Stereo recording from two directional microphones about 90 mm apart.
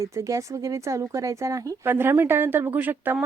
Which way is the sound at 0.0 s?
35° right (ahead or behind).